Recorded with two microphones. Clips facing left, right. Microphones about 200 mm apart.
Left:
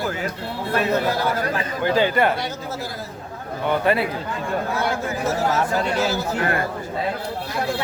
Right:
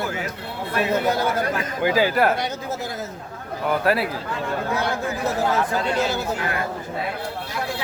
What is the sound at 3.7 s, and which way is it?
Speech, centre (ahead or behind).